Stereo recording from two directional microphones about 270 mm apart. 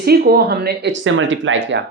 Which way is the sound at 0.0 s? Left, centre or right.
Right.